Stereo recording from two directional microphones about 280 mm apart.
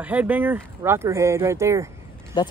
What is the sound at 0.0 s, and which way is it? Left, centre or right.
Speech, centre.